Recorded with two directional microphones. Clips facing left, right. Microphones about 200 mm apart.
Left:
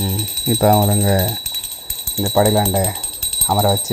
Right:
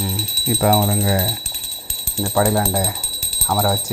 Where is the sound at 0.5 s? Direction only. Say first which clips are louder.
Left 3 dB; 35° left (ahead or behind).